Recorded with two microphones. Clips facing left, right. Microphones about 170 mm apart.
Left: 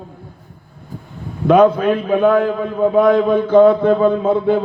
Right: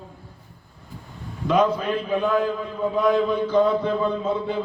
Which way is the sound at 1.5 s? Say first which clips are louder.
Left 9 dB; 55° left (ahead or behind).